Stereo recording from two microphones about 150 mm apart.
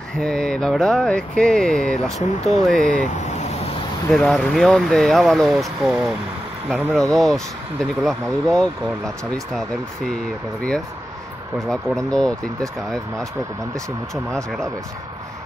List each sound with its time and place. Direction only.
0.2 s speech: 5° left (ahead or behind)
4.1 s speech: centre (ahead or behind)
6.8 s speech: 15° right (ahead or behind)
7.2 s speech: centre (ahead or behind)
14.1 s speech: 5° left (ahead or behind)